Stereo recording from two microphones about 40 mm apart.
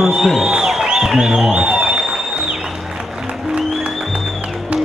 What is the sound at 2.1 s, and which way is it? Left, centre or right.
Music, centre.